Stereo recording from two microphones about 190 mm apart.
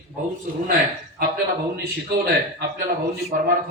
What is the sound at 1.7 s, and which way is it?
A man's voice, 60° right (ahead or behind).